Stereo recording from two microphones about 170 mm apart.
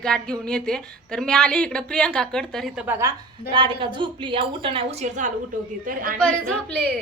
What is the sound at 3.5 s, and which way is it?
Speech, 30° right (ahead or behind).